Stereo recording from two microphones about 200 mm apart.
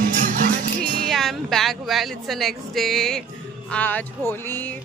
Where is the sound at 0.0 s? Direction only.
40° right (ahead or behind).